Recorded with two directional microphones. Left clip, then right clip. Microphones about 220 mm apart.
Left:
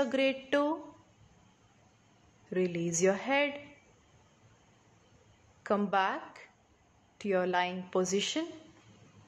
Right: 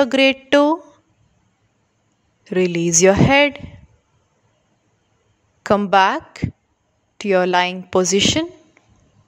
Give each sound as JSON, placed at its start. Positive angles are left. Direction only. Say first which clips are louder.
{"t": 0.0, "sound": "speech", "louder": "right 15 dB", "side_deg": -45}
{"t": 2.5, "sound": "speech", "louder": "right 15 dB", "side_deg": -45}
{"t": 5.6, "sound": "speech", "louder": "right 15 dB", "side_deg": -45}